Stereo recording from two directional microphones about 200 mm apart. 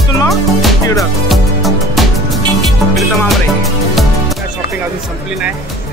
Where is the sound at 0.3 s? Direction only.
Centre (ahead or behind).